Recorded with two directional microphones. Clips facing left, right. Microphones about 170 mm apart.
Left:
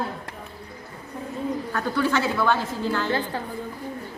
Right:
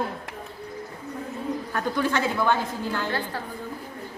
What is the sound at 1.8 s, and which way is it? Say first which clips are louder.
Speech: left 1 dB; 15° right (ahead or behind).